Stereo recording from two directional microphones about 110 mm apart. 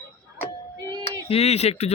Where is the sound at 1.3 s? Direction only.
70° left (ahead or behind).